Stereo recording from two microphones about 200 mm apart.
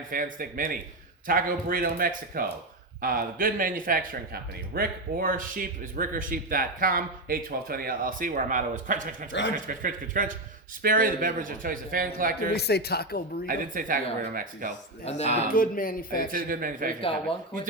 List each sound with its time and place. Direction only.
0.1 s speech: 45° right (ahead or behind)
12.5 s speech: 55° left (ahead or behind)
13.5 s speech: 40° right (ahead or behind)
15.0 s speech: 30° left (ahead or behind)
15.5 s speech: 45° left (ahead or behind)
16.3 s speech: 45° right (ahead or behind)